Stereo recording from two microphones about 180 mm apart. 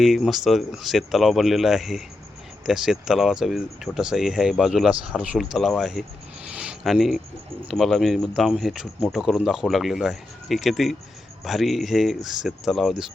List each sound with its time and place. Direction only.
0.0 s speech: centre (ahead or behind)
6.6 s a sound: 5° right (ahead or behind)
7.7 s speech: centre (ahead or behind)